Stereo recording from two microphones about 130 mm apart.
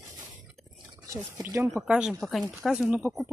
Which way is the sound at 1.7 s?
5° right (ahead or behind).